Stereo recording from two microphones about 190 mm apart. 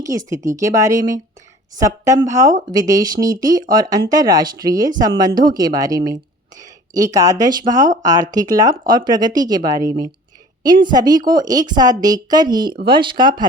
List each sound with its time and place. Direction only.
0.0 s speech: 15° right (ahead or behind)